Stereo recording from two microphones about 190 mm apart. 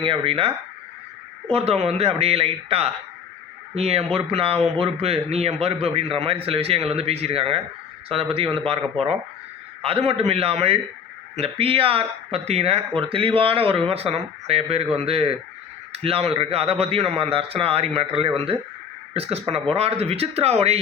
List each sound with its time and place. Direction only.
0.0 s speech: 25° right (ahead or behind)
9.8 s speech: 30° right (ahead or behind)